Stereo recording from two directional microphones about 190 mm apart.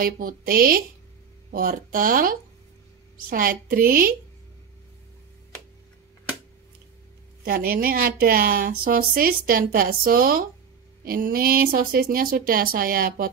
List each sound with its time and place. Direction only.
0.0 s a woman's voice: 50° right (ahead or behind)
7.4 s a woman's voice: 50° right (ahead or behind)